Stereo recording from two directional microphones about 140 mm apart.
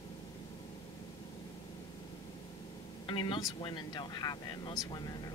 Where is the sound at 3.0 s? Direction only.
35° left (ahead or behind).